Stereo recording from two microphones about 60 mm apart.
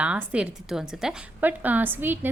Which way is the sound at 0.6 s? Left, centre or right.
Centre.